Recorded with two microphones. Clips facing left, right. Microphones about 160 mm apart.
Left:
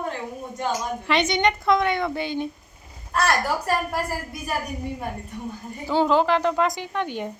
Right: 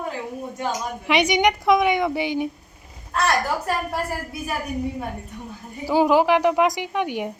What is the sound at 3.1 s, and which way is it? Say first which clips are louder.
A woman's voice: right 1 dB; centre (ahead or behind).